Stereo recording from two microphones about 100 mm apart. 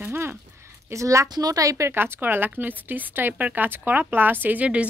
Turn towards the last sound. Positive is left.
turn(degrees=-10)  # may be behind; listen again after turning